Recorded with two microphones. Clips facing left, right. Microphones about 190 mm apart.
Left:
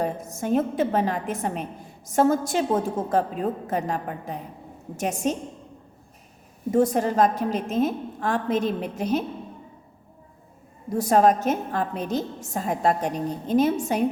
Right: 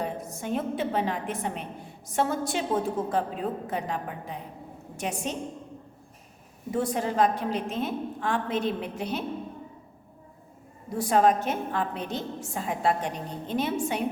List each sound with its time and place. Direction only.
0.0 s a woman's voice: 45° left (ahead or behind)
6.7 s a woman's voice: 45° left (ahead or behind)
10.9 s a woman's voice: 40° left (ahead or behind)